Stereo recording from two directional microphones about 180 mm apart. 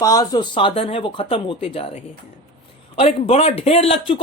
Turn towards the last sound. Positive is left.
turn(degrees=30)  # may be behind; listen again after turning